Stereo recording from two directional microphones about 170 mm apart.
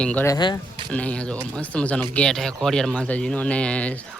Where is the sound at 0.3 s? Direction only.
25° left (ahead or behind).